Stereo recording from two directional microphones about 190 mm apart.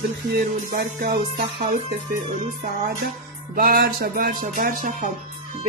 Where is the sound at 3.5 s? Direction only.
50° right (ahead or behind).